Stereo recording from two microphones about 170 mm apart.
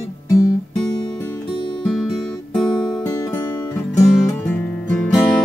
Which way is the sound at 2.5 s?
5° left (ahead or behind).